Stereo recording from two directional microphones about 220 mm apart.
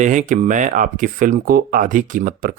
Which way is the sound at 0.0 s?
35° right (ahead or behind).